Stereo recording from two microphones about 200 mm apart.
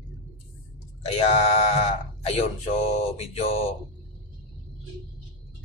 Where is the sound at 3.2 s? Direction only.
30° left (ahead or behind).